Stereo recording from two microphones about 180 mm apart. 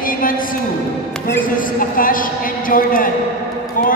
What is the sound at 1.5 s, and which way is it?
Speech, 50° left (ahead or behind).